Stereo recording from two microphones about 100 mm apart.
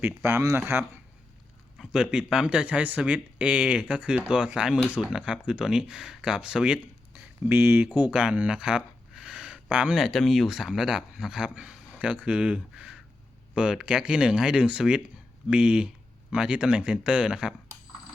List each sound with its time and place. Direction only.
0.0 s speech: 20° right (ahead or behind)
1.8 s speech: 5° right (ahead or behind)
7.5 s speech: 20° right (ahead or behind)